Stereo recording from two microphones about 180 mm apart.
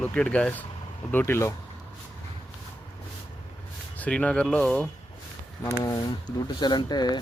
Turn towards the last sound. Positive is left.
turn(degrees=25)  # may be behind; listen again after turning